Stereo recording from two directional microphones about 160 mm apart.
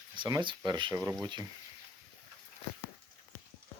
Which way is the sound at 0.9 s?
10° right (ahead or behind).